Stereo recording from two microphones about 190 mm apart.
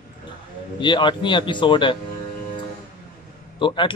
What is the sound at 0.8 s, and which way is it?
A man's voice, 25° left (ahead or behind).